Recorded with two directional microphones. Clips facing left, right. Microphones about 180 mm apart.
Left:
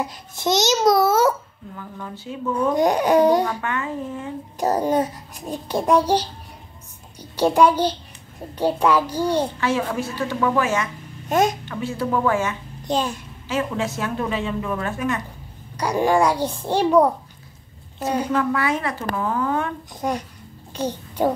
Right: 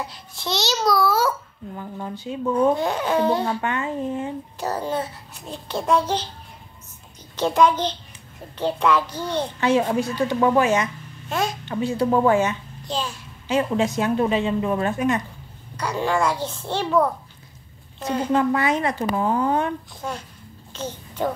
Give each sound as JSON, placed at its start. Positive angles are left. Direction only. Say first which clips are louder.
{"t": 0.0, "sound": "a child's voice", "louder": "left 7 dB", "side_deg": 45}
{"t": 0.7, "sound": "a child's voice", "louder": "left 2 dB", "side_deg": 20}
{"t": 1.8, "sound": "a woman's voice", "louder": "right 3 dB", "side_deg": -30}
{"t": 2.7, "sound": "a child's voice", "louder": "left 5 dB", "side_deg": 15}
{"t": 3.6, "sound": "a woman's voice", "louder": "right 2 dB", "side_deg": -20}
{"t": 4.8, "sound": "a child's voice", "louder": "left 6 dB", "side_deg": 15}
{"t": 9.6, "sound": "a woman's voice", "louder": "right 3 dB", "side_deg": -20}
{"t": 12.8, "sound": "a child's voice", "louder": "left 5 dB", "side_deg": 20}
{"t": 13.5, "sound": "a woman's voice", "louder": "right 3 dB", "side_deg": -20}
{"t": 15.7, "sound": "a child's voice", "louder": "left 4 dB", "side_deg": 15}
{"t": 18.3, "sound": "a woman's voice", "louder": "right 5 dB", "side_deg": -20}
{"t": 19.9, "sound": "a child's voice", "louder": "left 6 dB", "side_deg": 15}